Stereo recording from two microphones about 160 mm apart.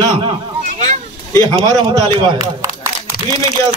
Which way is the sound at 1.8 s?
30° right (ahead or behind).